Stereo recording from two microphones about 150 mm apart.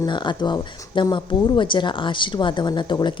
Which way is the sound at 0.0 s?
30° left (ahead or behind).